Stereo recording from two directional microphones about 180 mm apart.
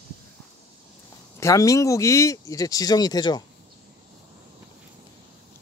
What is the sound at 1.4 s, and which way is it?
Speech, 20° left (ahead or behind).